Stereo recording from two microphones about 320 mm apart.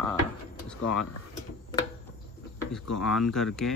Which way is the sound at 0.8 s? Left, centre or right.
Left.